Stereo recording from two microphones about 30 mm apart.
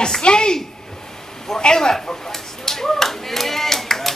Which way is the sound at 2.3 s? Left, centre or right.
Centre.